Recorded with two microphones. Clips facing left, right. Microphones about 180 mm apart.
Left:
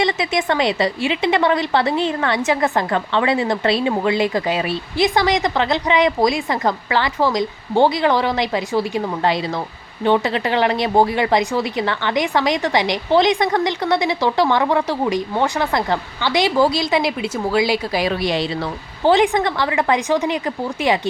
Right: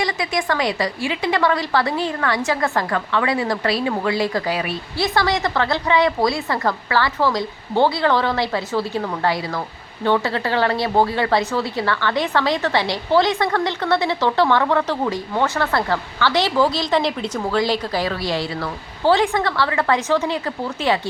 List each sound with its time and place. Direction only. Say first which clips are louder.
0.0 s a woman's voice: left 3 dB; 20° left (ahead or behind)